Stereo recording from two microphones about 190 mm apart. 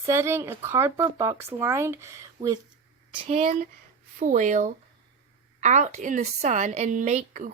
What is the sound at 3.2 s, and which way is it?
Speech, 35° right (ahead or behind).